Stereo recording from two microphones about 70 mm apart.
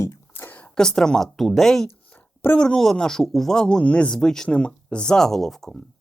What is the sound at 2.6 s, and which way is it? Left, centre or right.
Speech, centre.